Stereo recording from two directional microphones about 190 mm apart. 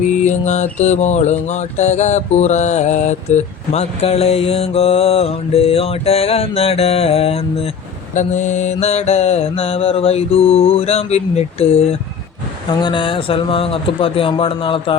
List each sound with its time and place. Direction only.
0.1 s mantra: 40° left (ahead or behind)
12.8 s speech: 25° left (ahead or behind)